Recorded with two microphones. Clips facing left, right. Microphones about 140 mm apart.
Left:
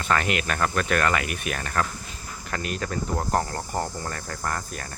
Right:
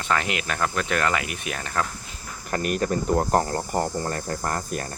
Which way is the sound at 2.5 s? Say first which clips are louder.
Right 5 dB; 30° right (ahead or behind).